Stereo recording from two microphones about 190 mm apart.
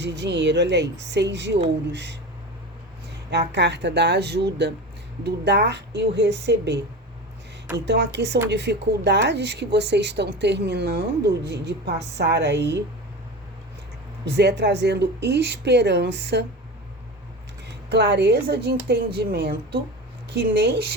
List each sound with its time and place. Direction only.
0.0 s speech: 65° right (ahead or behind)
3.2 s speech: 65° right (ahead or behind)
7.9 s speech: 65° right (ahead or behind)
14.3 s speech: 60° right (ahead or behind)
17.7 s speech: 60° right (ahead or behind)